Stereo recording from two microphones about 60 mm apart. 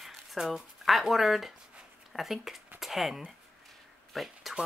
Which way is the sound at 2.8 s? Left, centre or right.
Centre.